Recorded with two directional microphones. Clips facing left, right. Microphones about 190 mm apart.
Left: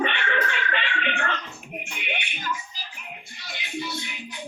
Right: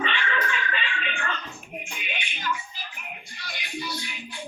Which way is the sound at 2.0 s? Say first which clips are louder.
Left 3 dB; 65° left (ahead or behind).